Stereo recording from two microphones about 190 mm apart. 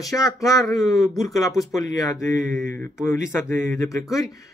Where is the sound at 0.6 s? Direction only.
Centre (ahead or behind).